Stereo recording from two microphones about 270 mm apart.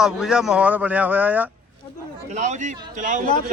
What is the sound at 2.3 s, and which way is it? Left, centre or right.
Speech, right.